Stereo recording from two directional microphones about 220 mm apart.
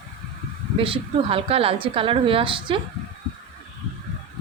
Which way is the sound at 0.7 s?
25° right (ahead or behind).